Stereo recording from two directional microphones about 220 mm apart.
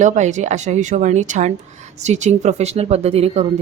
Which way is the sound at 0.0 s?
35° right (ahead or behind).